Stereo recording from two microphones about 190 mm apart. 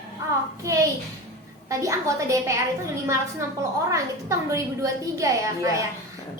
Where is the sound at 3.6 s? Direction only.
15° right (ahead or behind).